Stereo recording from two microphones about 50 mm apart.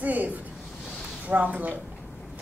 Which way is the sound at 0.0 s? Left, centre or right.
Right.